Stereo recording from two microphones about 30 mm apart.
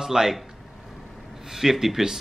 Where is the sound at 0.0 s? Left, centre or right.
Centre.